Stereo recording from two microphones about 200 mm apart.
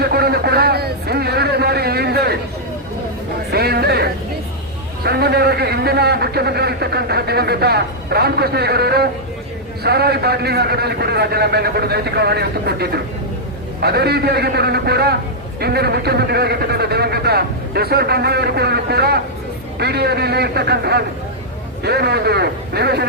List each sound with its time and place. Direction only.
0.0 s a sound: 50° right (ahead or behind)
3.5 s music: 50° right (ahead or behind)
5.0 s a man's voice: 55° right (ahead or behind)